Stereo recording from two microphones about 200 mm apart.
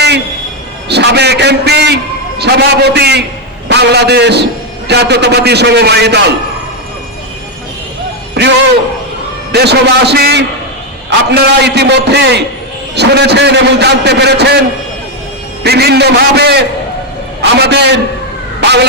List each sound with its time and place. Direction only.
0.9 s a man's voice: 55° right (ahead or behind)
8.4 s music: 55° right (ahead or behind)
9.5 s a man's voice: 55° right (ahead or behind)
15.6 s a man's voice: 55° right (ahead or behind)
18.6 s dog: 55° right (ahead or behind)